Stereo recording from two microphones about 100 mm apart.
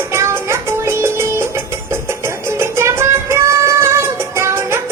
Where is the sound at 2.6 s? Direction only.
25° right (ahead or behind).